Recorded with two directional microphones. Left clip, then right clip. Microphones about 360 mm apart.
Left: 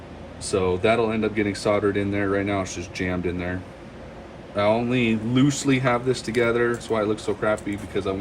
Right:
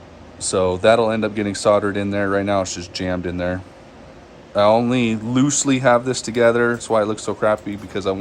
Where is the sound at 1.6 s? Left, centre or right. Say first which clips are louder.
Right 7 dB; centre.